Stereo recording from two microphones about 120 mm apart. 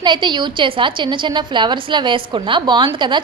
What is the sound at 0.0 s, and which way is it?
A woman's voice, 40° right (ahead or behind).